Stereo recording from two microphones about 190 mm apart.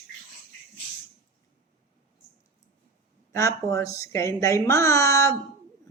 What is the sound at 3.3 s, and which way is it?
A woman's voice, 15° left (ahead or behind).